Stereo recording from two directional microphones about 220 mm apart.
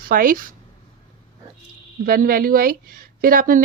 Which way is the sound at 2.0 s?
40° right (ahead or behind).